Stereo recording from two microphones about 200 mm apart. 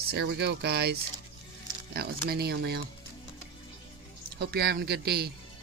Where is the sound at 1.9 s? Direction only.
50° right (ahead or behind).